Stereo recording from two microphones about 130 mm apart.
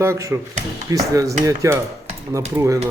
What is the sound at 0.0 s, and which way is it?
A man's voice, 20° right (ahead or behind).